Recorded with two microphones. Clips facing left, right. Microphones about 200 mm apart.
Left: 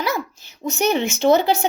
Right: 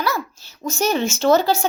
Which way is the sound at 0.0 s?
20° left (ahead or behind).